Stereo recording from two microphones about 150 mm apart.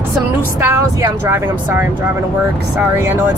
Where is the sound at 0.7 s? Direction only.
15° right (ahead or behind).